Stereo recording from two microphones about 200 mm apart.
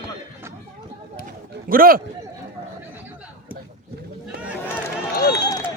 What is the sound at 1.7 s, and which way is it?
Speech, 45° right (ahead or behind).